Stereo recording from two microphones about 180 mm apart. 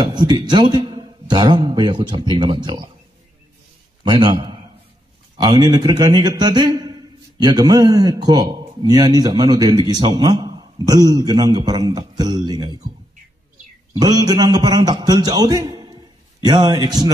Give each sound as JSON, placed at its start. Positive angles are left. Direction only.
{"t": 0.0, "sound": "a man's voice", "side_deg": -25}
{"t": 4.0, "sound": "a man's voice", "side_deg": -25}
{"t": 13.9, "sound": "a man's voice", "side_deg": -20}